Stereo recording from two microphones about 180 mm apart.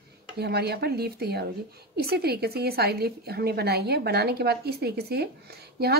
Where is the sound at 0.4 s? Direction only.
65° right (ahead or behind).